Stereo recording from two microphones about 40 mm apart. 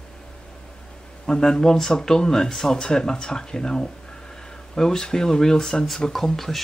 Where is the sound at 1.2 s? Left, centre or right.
Centre.